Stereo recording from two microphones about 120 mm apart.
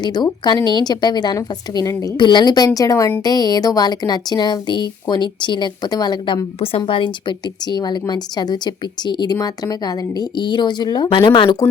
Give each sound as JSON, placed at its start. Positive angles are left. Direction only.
{"t": 0.0, "sound": "speech", "side_deg": 35}
{"t": 2.1, "sound": "speech", "side_deg": 40}